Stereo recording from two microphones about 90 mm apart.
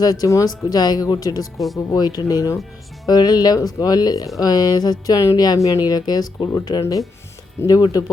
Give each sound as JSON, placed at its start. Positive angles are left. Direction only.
{"t": 0.0, "sound": "speech", "side_deg": 45}
{"t": 1.5, "sound": "speech", "side_deg": 0}
{"t": 1.9, "sound": "speech", "side_deg": 50}